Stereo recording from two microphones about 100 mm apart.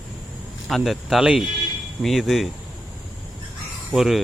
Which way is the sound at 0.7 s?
Centre (ahead or behind).